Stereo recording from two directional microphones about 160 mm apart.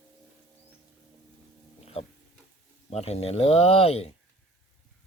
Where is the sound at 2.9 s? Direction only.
40° left (ahead or behind).